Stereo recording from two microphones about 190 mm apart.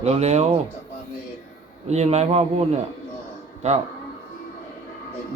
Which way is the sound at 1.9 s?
35° right (ahead or behind).